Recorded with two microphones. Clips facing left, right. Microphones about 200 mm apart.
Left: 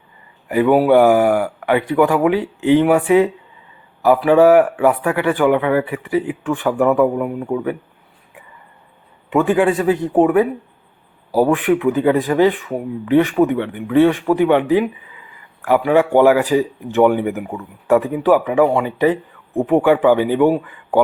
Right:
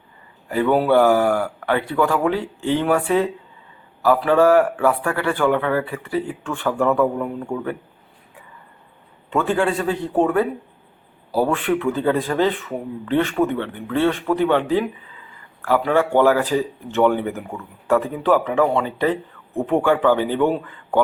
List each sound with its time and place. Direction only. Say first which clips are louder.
0.4 s speech: left 5 dB; 15° left (ahead or behind)
9.3 s speech: left 5 dB; 15° left (ahead or behind)